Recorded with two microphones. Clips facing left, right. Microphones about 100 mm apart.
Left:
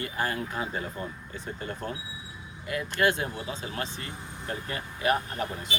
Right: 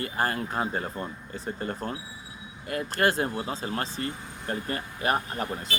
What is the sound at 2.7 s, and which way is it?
Speech, 45° right (ahead or behind).